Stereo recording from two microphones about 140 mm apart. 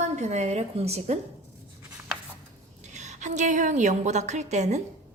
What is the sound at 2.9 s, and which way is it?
A woman's voice, 60° right (ahead or behind).